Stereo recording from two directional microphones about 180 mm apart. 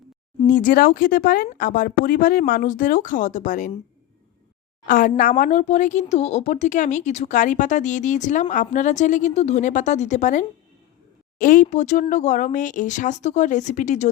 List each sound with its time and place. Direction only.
0.4 s speech: 45° left (ahead or behind)
4.9 s speech: 50° left (ahead or behind)